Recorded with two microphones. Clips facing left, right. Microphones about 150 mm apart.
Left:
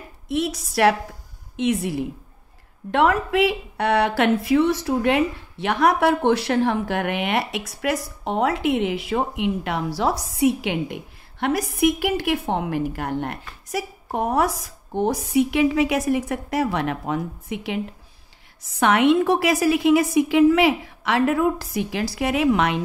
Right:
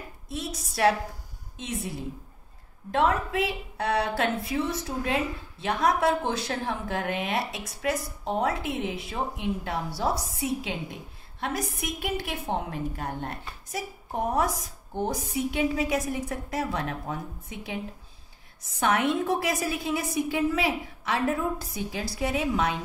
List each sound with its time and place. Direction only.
0.3 s a woman's voice: 80° left
10.3 s a woman's voice: 75° left (ahead or behind)